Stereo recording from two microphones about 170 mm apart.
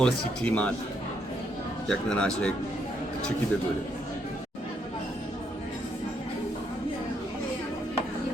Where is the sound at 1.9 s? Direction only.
5° left (ahead or behind).